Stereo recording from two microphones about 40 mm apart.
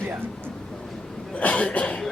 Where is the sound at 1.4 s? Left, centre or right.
Left.